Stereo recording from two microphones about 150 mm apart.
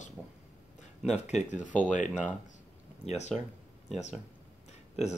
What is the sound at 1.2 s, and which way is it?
Speech, 50° left (ahead or behind).